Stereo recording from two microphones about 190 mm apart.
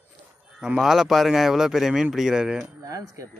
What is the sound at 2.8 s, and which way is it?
Speech, 20° right (ahead or behind).